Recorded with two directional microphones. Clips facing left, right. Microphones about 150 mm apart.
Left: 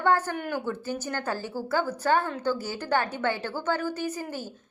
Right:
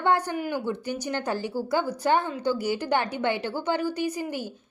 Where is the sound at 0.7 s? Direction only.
15° right (ahead or behind).